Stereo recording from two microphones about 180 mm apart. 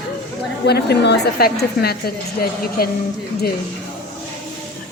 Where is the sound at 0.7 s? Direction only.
65° left (ahead or behind).